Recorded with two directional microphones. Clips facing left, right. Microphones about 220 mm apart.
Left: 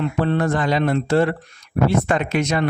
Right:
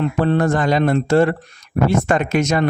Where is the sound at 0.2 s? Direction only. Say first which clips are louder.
Right 3 dB; 45° right (ahead or behind).